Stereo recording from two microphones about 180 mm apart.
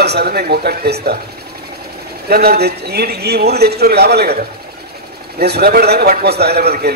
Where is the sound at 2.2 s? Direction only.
60° right (ahead or behind).